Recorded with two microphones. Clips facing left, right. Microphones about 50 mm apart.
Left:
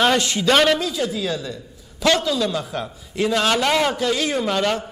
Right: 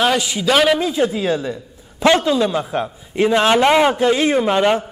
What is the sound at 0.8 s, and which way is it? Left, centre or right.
A man's voice, right.